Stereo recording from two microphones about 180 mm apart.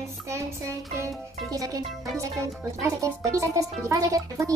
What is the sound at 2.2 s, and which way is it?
A child's voice, 15° right (ahead or behind).